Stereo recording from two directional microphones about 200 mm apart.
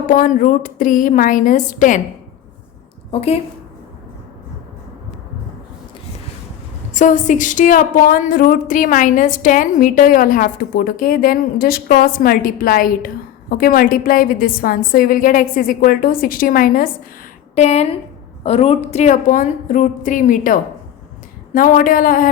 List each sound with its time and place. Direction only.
0.1 s a woman's voice: 45° left (ahead or behind)
3.1 s a woman's voice: 30° left (ahead or behind)
6.9 s speech: 40° left (ahead or behind)
17.5 s a woman's voice: 35° left (ahead or behind)